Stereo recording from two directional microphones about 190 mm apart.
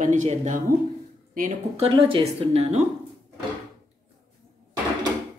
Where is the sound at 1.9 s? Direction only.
30° right (ahead or behind).